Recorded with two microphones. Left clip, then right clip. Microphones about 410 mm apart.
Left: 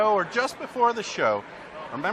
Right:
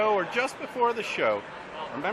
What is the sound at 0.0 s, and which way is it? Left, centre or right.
A man's voice, left.